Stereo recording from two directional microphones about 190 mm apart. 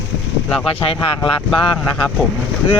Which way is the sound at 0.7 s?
30° left (ahead or behind).